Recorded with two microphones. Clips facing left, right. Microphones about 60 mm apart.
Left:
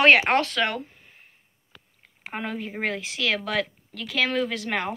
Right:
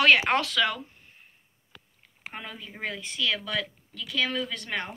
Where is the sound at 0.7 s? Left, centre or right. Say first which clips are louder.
Left 3 dB; left.